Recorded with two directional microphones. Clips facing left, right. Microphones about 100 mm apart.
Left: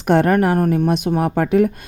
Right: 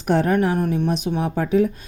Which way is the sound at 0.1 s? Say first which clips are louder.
Left 4 dB; 70° left (ahead or behind).